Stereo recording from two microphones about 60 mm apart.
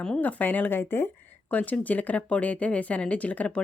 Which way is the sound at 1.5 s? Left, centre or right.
Left.